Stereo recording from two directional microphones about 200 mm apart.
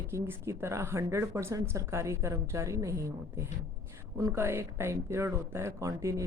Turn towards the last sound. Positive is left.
turn(degrees=-15)  # may be behind; listen again after turning